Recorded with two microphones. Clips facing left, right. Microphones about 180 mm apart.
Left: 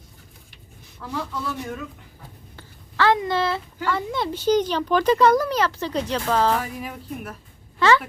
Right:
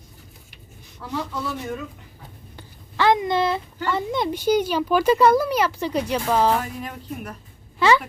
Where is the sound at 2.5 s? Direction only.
15° right (ahead or behind).